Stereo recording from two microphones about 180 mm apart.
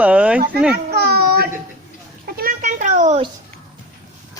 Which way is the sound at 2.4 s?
50° right (ahead or behind).